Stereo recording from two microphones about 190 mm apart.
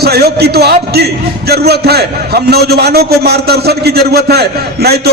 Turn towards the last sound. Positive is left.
turn(degrees=-55)  # may be behind; listen again after turning